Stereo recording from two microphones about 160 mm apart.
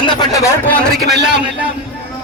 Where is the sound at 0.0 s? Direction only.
25° left (ahead or behind).